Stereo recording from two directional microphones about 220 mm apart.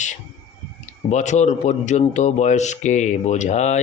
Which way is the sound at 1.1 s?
30° left (ahead or behind).